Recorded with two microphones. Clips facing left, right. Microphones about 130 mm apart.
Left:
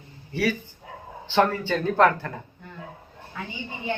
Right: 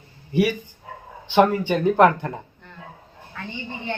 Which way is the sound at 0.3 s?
15° right (ahead or behind).